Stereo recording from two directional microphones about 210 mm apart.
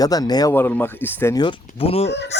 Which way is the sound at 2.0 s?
55° left (ahead or behind).